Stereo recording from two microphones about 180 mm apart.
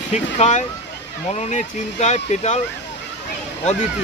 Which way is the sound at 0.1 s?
40° left (ahead or behind).